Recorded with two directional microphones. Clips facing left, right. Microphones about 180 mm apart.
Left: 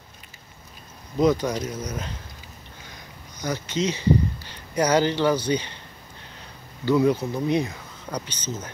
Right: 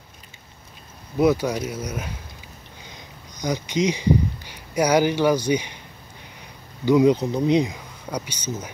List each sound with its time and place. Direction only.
1.1 s speech: 10° right (ahead or behind)
6.8 s speech: 15° right (ahead or behind)